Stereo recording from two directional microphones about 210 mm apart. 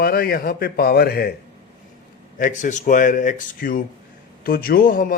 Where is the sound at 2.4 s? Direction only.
40° left (ahead or behind).